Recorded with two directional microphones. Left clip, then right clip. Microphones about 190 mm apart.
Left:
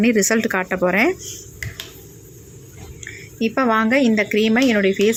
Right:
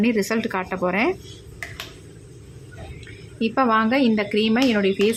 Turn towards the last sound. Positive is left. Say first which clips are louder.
# left 3 dB
turn(degrees=15)  # may be behind; listen again after turning